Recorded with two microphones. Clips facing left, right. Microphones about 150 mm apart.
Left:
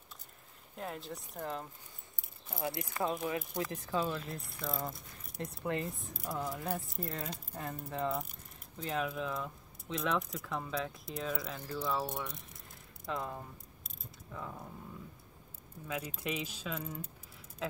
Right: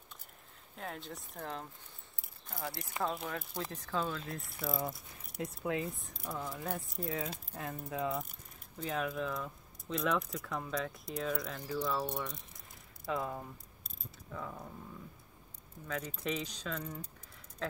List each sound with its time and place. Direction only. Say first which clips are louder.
0.7 s speech: left 2 dB; centre (ahead or behind)
2.5 s speech: left 4 dB; 20° left (ahead or behind)
4.3 s speech: right 1 dB; centre (ahead or behind)
13.8 s mechanisms: right 2 dB; centre (ahead or behind)
15.9 s speech: right 1 dB; 10° left (ahead or behind)